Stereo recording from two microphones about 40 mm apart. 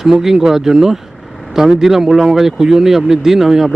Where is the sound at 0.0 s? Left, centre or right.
Centre.